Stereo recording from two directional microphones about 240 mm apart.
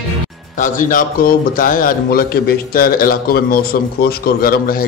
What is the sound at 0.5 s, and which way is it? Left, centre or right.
A man's voice, left.